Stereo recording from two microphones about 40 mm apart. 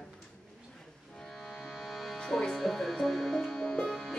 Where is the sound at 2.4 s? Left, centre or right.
Centre.